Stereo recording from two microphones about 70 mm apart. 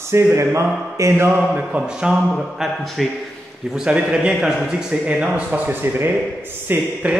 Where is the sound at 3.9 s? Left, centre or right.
Centre.